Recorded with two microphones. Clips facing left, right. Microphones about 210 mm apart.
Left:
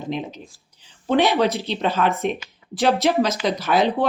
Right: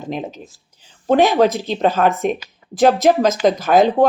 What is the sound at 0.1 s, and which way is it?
Speech, 45° right (ahead or behind).